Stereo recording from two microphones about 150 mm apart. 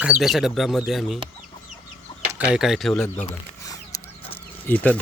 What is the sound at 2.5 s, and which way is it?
Speech, centre (ahead or behind).